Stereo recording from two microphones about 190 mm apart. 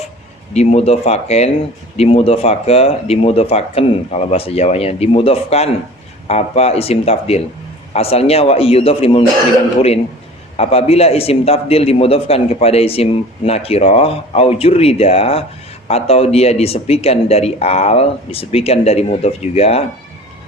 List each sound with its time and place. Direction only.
0.5 s a man's voice: 35° left (ahead or behind)
10.6 s a man's voice: 30° left (ahead or behind)